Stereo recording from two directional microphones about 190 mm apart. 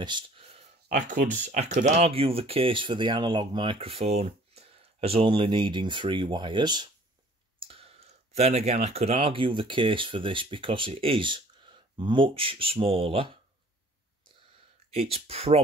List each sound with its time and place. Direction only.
0.0 s a sound: 25° right (ahead or behind)
0.8 s speech: 40° right (ahead or behind)
14.9 s speech: 30° right (ahead or behind)